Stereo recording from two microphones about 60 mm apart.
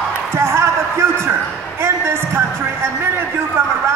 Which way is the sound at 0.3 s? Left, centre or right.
Right.